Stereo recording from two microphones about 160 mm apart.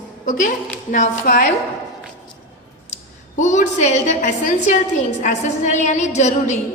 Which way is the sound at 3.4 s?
50° left (ahead or behind).